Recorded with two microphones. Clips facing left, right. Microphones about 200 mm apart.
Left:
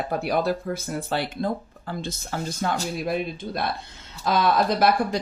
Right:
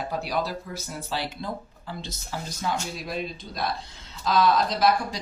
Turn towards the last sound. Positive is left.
turn(degrees=55)  # may be behind; listen again after turning